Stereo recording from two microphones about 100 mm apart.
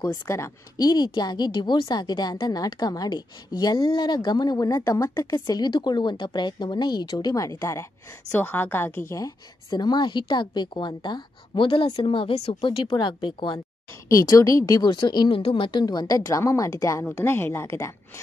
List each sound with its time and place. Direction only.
0.1 s speech: 35° left (ahead or behind)
5.3 s speech: 45° left (ahead or behind); by 7.8 s 30° left (ahead or behind)
8.3 s a woman's voice: 20° left (ahead or behind); by 11.6 s 50° left (ahead or behind)
11.6 s speech: 65° left (ahead or behind); by 12.6 s 90° left
12.6 s speech: 55° left (ahead or behind)
14.0 s a woman's voice: 35° left (ahead or behind)
14.9 s speech: 50° left (ahead or behind)
15.8 s a woman's voice: 45° left (ahead or behind); by 17.9 s 30° left (ahead or behind)